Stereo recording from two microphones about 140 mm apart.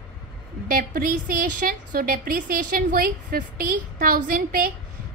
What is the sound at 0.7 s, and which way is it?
A woman's voice, 90° right.